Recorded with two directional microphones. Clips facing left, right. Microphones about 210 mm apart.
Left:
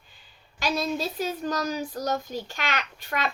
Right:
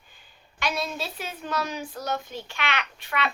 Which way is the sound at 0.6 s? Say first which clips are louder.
Left 3 dB; 40° left (ahead or behind).